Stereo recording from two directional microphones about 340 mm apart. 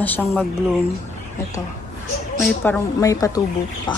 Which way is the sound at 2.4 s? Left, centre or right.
Centre.